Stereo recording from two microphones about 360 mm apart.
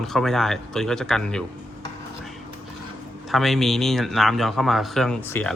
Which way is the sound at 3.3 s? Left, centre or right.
Centre.